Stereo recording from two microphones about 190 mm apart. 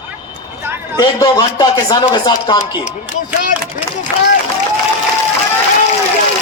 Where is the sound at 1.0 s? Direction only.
20° left (ahead or behind).